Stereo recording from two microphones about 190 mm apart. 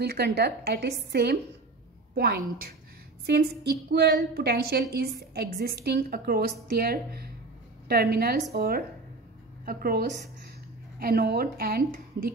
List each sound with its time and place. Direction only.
0.0 s a woman's voice: 55° right (ahead or behind)